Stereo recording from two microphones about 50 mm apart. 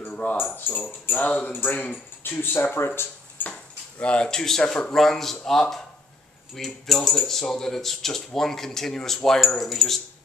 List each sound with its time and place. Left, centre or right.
0.1 s keys jangling: left
1.8 s speech: left
2.4 s speech: left
3.4 s dishes: left
4.0 s speech: left
4.9 s cutlery: centre
5.4 s speech: centre
6.5 s cutlery: centre
7.5 s speech: centre
9.6 s cutlery: centre